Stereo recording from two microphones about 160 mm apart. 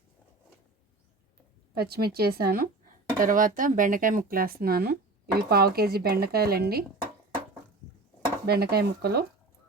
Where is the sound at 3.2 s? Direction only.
55° right (ahead or behind); by 6.8 s 75° right (ahead or behind).